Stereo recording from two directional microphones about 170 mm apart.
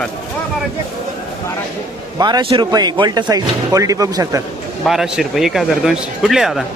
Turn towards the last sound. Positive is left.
turn(degrees=0)  # may be behind; listen again after turning